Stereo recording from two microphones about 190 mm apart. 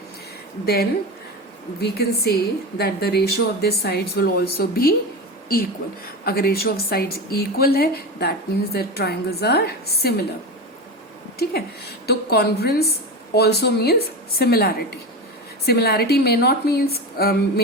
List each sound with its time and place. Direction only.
0.6 s a woman's voice: 55° left (ahead or behind)
6.2 s a woman's voice: 55° left (ahead or behind)
12.0 s a woman's voice: 55° left (ahead or behind)